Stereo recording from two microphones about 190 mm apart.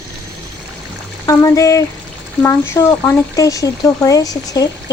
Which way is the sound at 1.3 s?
15° left (ahead or behind).